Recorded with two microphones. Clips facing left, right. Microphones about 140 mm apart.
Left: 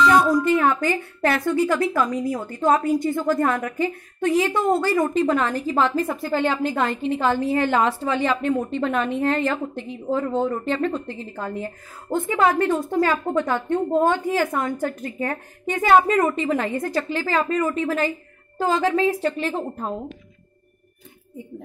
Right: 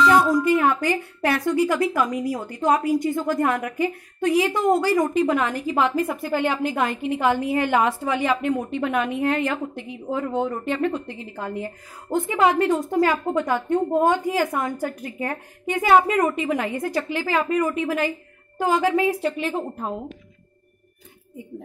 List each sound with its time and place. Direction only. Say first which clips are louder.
0.3 s a woman's voice: even; 15° right (ahead or behind)